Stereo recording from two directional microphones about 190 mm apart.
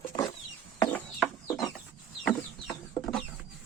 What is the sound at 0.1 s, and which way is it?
Chicken, 20° left (ahead or behind).